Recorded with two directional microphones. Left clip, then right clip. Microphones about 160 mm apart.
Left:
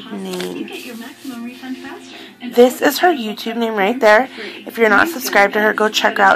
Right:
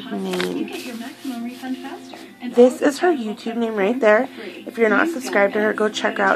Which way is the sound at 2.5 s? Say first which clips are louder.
Left 3 dB; 15° left (ahead or behind).